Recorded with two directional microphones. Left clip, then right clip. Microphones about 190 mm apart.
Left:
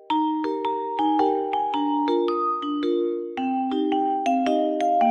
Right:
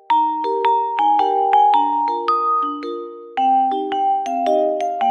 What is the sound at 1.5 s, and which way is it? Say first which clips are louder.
Music: right 11 dB; 40° right (ahead or behind).